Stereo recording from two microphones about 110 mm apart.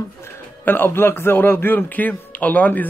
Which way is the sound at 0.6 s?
20° left (ahead or behind).